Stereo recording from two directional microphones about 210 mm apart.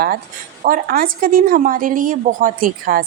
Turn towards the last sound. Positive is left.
turn(degrees=-40)  # may be behind; listen again after turning